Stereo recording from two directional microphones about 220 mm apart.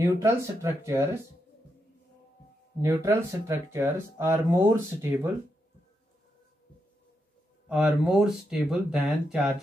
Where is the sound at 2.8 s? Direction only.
15° right (ahead or behind).